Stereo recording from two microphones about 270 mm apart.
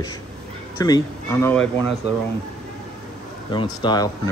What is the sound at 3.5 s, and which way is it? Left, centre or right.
Speech, centre.